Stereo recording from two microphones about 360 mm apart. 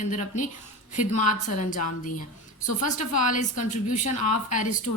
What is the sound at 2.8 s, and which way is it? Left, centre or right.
A woman's voice, left.